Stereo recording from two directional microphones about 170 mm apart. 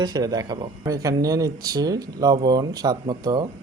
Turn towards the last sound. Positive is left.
turn(degrees=-25)  # may be behind; listen again after turning